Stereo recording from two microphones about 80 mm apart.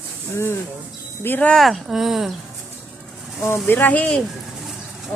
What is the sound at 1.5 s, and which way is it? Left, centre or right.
Speech, centre.